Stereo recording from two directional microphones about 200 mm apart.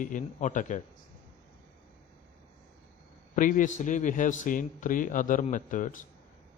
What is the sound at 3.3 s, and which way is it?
A man's voice, 40° left (ahead or behind).